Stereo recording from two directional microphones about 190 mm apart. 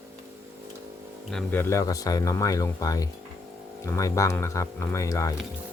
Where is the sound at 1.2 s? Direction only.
5° left (ahead or behind).